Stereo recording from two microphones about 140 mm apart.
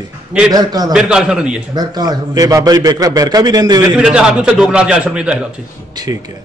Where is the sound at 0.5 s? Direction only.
30° right (ahead or behind).